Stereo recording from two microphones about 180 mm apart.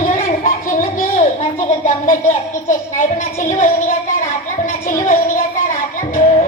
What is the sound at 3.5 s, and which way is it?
Speech, 45° left (ahead or behind).